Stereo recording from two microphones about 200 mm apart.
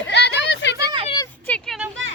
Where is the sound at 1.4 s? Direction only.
5° left (ahead or behind).